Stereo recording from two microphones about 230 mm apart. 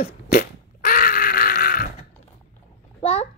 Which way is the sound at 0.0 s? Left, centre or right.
Left.